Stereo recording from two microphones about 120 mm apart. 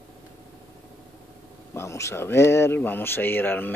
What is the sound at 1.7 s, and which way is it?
Speech, 25° left (ahead or behind).